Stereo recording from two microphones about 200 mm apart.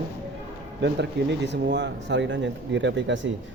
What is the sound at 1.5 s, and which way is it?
Speech, 60° right (ahead or behind).